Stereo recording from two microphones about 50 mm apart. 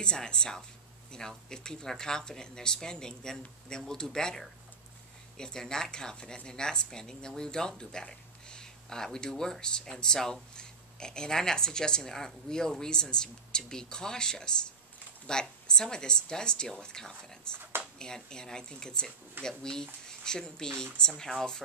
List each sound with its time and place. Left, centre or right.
0.0 s a woman's voice: centre